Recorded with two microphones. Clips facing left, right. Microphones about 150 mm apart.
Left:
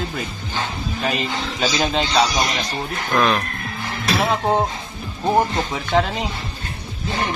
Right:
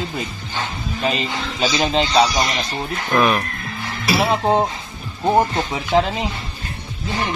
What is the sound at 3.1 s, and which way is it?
Speech, 10° right (ahead or behind).